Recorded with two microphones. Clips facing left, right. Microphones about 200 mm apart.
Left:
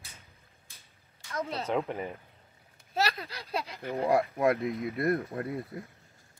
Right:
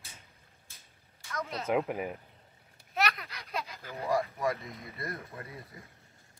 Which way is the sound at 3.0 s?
30° left (ahead or behind).